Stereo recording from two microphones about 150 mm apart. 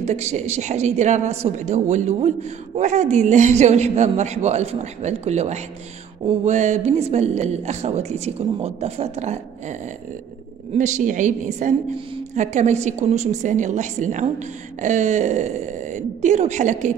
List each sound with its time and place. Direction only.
0.0 s a man's voice: 45° right (ahead or behind)